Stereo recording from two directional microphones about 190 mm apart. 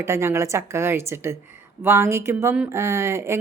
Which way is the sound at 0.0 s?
15° right (ahead or behind).